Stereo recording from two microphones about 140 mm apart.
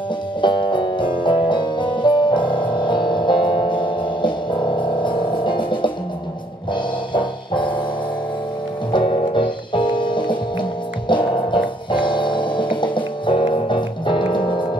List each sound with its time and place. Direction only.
0.4 s music: 35° left (ahead or behind)
8.9 s music: 35° left (ahead or behind)